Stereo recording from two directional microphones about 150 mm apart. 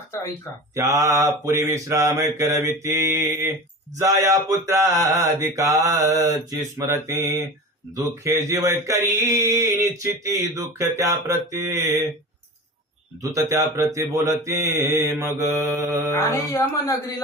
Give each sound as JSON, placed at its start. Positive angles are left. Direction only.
{"t": 0.7, "sound": "mantra", "side_deg": -20}
{"t": 13.3, "sound": "mantra", "side_deg": -20}
{"t": 16.1, "sound": "speech", "side_deg": 20}